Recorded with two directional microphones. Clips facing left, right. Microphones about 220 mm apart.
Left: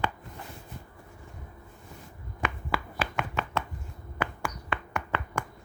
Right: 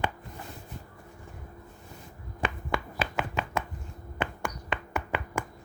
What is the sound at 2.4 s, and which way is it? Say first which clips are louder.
Chopping: right 1 dB; 30° right (ahead or behind).